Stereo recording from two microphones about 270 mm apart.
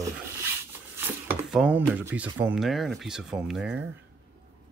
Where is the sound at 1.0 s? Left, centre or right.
Centre.